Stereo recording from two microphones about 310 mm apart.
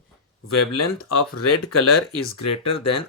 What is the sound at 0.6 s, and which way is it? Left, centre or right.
Speech, left.